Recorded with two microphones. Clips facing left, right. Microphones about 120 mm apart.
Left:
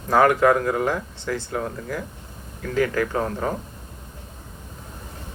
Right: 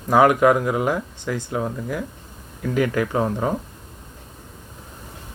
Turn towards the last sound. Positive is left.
turn(degrees=-20)  # may be behind; listen again after turning